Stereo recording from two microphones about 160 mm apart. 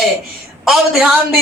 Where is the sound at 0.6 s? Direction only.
5° right (ahead or behind).